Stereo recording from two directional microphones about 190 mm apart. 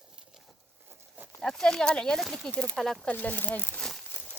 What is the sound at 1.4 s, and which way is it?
Speech, 5° left (ahead or behind).